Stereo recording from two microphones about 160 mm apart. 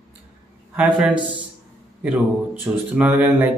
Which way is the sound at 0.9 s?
5° right (ahead or behind).